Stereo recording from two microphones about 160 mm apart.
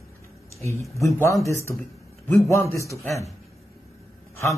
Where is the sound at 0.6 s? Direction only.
15° left (ahead or behind).